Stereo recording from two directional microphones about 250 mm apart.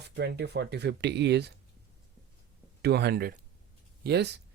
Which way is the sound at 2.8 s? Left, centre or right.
Right.